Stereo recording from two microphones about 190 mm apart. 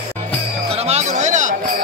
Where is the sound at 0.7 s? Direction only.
35° right (ahead or behind).